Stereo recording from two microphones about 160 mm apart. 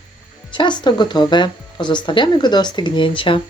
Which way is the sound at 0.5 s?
30° left (ahead or behind).